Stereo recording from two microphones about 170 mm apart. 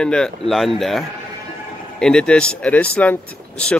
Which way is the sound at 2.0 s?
5° left (ahead or behind).